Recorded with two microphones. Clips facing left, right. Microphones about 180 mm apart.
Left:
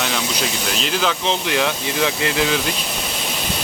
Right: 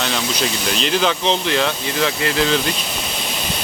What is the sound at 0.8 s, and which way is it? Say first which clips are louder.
Speech: right 3 dB; centre (ahead or behind).